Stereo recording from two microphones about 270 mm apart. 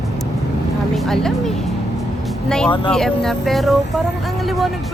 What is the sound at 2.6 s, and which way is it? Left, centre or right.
Speech, centre.